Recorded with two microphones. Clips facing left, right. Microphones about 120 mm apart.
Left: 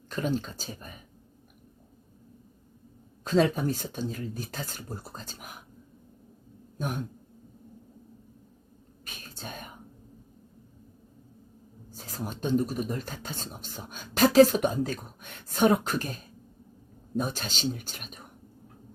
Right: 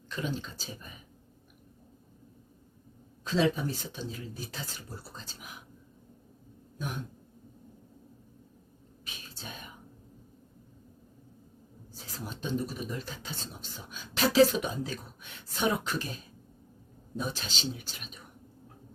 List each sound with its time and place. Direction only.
0.1 s speech: 45° left (ahead or behind)
3.2 s speech: 45° left (ahead or behind)
6.7 s a sound: 45° left (ahead or behind)
9.0 s whispering: 50° left (ahead or behind)
11.9 s speech: 50° left (ahead or behind)